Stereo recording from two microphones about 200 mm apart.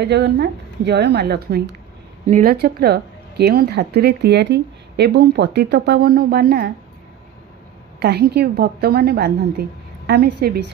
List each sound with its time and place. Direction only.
0.0 s speech: 55° right (ahead or behind)
8.0 s a woman's voice: 55° right (ahead or behind)